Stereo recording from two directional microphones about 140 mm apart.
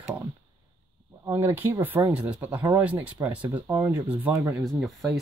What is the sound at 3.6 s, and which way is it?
Speech, 25° right (ahead or behind).